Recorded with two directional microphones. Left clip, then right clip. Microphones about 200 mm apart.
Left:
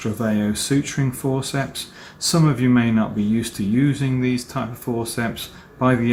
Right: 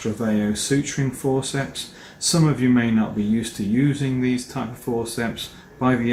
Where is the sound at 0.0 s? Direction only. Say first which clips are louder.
Left 1 dB; 40° left (ahead or behind).